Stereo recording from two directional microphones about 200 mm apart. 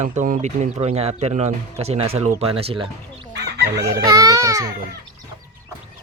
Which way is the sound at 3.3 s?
55° right (ahead or behind).